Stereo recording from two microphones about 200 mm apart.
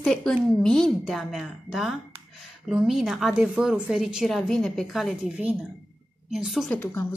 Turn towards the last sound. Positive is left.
turn(degrees=15)  # may be behind; listen again after turning